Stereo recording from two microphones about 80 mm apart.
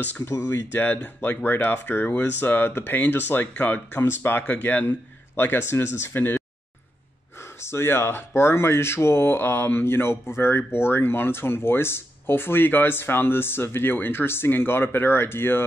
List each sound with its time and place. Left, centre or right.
0.0 s speech: left
7.6 s speech: left